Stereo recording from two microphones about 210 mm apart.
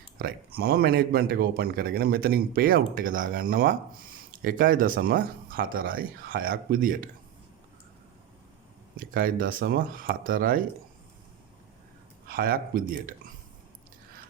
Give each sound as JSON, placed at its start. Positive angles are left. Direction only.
{"t": 0.2, "sound": "a man's voice", "side_deg": -45}
{"t": 9.0, "sound": "a man's voice", "side_deg": -40}
{"t": 12.3, "sound": "a man's voice", "side_deg": -45}